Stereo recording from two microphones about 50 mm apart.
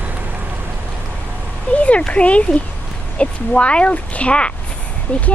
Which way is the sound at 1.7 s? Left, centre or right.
Left.